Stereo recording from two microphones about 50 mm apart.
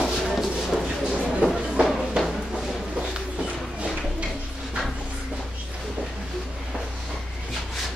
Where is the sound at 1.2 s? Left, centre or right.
Centre.